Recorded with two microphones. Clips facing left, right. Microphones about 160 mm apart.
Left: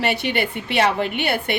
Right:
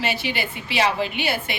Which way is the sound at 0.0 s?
65° left (ahead or behind).